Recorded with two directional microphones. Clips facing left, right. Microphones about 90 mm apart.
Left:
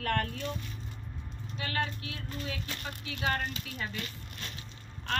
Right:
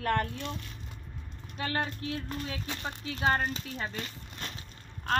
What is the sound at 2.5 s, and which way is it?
A woman's voice, 20° right (ahead or behind).